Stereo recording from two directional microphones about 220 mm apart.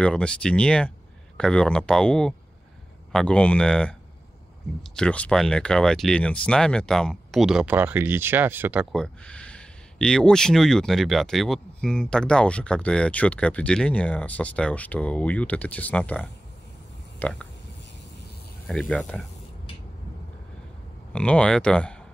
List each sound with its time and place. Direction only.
0.0 s speech: 5° left (ahead or behind)
4.9 s speech: 5° left (ahead or behind)
8.9 s speech: 5° left (ahead or behind)
18.7 s speech: 5° left (ahead or behind)
21.1 s speech: 5° left (ahead or behind)